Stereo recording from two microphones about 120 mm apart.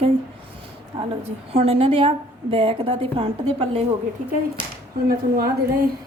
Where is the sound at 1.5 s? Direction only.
55° right (ahead or behind).